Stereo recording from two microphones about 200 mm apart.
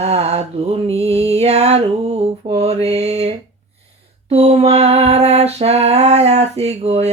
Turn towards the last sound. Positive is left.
turn(degrees=-30)  # may be behind; listen again after turning